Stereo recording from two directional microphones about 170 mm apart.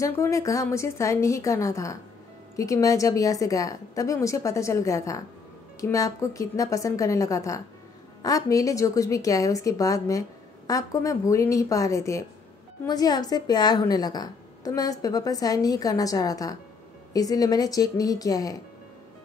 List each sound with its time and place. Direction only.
0.0 s a woman's voice: 20° left (ahead or behind)